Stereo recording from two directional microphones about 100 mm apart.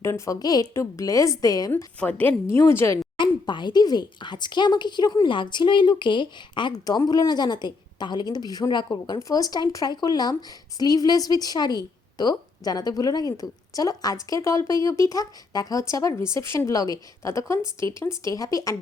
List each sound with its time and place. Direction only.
0.0 s a woman's voice: 25° left (ahead or behind)
0.3 s a woman's voice: 40° left (ahead or behind)
1.7 s a woman's voice: 15° left (ahead or behind)
3.2 s speech: 50° left (ahead or behind)
6.7 s a woman's voice: 40° left (ahead or behind)